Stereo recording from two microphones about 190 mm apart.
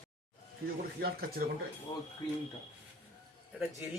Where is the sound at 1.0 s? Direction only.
50° right (ahead or behind).